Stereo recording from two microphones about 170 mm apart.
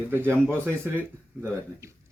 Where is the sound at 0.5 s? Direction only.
15° right (ahead or behind).